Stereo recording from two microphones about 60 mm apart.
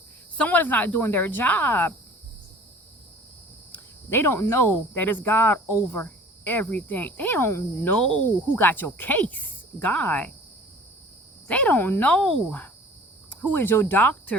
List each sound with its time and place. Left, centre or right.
0.3 s speech: left
3.7 s cricket: left
4.7 s speech: left
7.9 s speech: centre
8.5 s speech: left
11.4 s speech: left